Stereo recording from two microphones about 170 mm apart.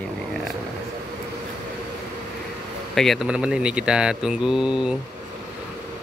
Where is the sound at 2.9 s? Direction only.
Centre (ahead or behind).